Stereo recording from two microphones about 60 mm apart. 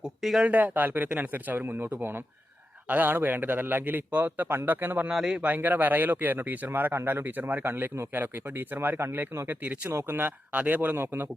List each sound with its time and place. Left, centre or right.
0.2 s speech: centre
0.4 s speech: right
5.0 s speech: centre
5.4 s speech: right
9.9 s speech: right
10.2 s speech: right